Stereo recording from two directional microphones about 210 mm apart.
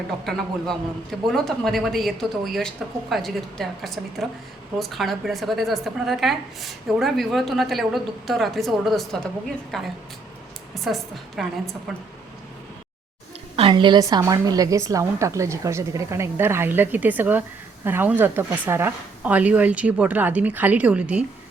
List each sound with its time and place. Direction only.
0.3 s a woman's voice: centre (ahead or behind)
13.6 s a woman's voice: 25° right (ahead or behind); by 21.2 s 5° right (ahead or behind)